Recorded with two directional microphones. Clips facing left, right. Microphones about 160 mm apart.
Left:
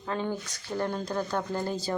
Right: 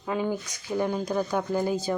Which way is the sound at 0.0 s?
10° right (ahead or behind).